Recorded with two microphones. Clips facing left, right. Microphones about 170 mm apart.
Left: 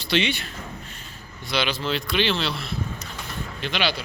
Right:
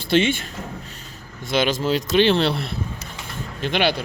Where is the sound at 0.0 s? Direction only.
50° right (ahead or behind).